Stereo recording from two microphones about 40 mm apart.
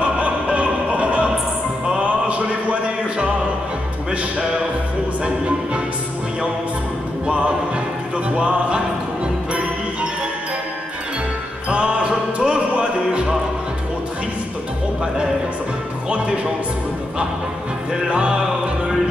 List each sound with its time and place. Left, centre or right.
0.0 s music: right
7.2 s music: right
11.7 s music: right
18.1 s music: right